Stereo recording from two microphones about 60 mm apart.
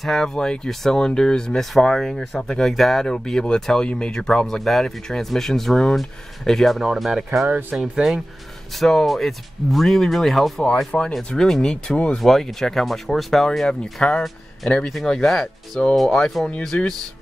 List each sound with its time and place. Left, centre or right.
0.0 s speech: centre
12.2 s speech: centre
13.7 s speech: centre
14.9 s speech: centre